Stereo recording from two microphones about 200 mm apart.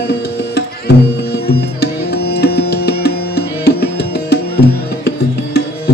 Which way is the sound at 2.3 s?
55° left (ahead or behind).